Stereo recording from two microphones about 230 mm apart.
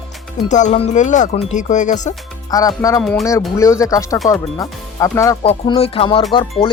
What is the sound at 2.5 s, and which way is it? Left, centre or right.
Speech, centre.